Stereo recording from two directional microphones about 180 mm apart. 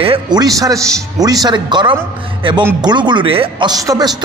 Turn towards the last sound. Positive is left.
turn(degrees=-20)  # may be behind; listen again after turning